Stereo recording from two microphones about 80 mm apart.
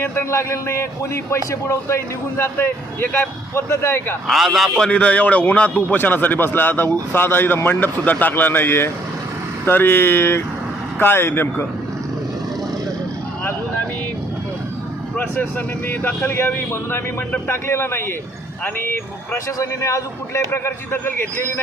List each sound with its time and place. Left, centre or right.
0.0 s a man's voice: left
0.3 s a man's voice: left
4.3 s a man's voice: centre
4.9 s a man's voice: centre
15.2 s a man's voice: left